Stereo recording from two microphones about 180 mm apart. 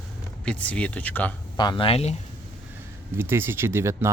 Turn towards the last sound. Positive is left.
turn(degrees=-15)  # may be behind; listen again after turning